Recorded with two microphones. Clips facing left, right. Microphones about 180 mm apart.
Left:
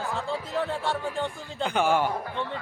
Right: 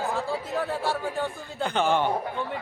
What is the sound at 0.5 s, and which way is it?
Speech, 5° right (ahead or behind).